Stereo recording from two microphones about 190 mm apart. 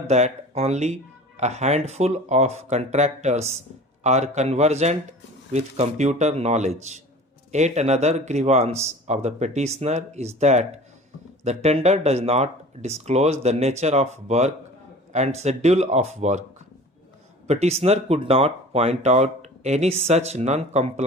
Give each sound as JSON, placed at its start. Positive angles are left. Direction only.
{"t": 0.1, "sound": "speech", "side_deg": -35}
{"t": 17.4, "sound": "speech", "side_deg": -35}